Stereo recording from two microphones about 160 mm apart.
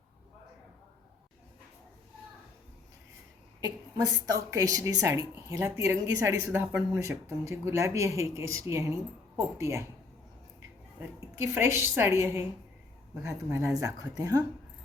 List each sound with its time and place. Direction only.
3.9 s speech: 20° right (ahead or behind)
11.3 s a woman's voice: 15° right (ahead or behind)